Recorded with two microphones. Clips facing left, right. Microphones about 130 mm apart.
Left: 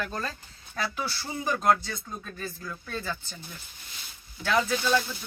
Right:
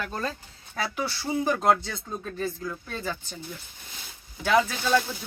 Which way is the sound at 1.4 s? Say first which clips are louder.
Even; 25° right (ahead or behind).